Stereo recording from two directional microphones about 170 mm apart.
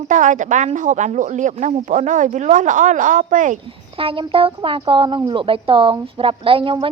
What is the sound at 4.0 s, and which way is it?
Speech, 30° right (ahead or behind).